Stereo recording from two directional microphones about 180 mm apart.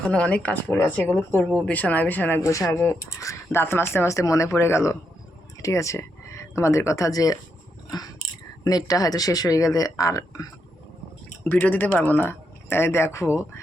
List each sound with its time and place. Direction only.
0.1 s speech: 5° left (ahead or behind)
7.9 s biting: 20° left (ahead or behind)
8.6 s speech: 20° left (ahead or behind)